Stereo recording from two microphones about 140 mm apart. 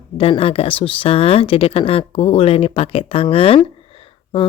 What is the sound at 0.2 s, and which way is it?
Speech, 40° left (ahead or behind).